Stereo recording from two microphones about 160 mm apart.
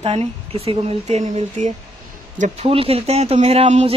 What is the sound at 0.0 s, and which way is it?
Speech, 40° right (ahead or behind).